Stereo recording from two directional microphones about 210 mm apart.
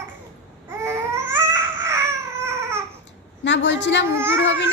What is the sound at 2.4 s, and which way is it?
Baby cry, 10° right (ahead or behind).